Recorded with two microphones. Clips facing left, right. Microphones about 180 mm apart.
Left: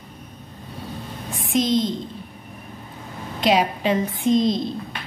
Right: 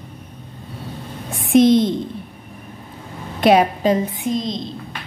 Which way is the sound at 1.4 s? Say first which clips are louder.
Right 8 dB; 65° right (ahead or behind).